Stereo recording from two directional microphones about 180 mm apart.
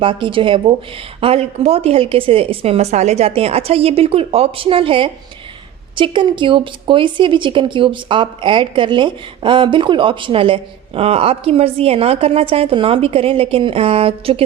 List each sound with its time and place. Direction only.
0.0 s a woman's voice: 30° right (ahead or behind)